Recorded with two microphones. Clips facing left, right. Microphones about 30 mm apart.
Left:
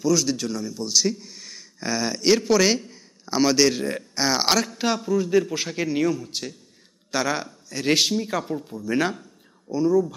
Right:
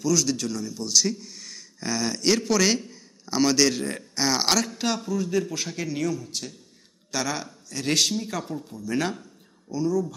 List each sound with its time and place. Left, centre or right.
0.0 s a man's voice: centre